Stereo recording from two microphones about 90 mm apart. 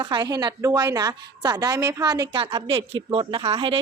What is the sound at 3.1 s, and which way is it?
Speech, 85° right.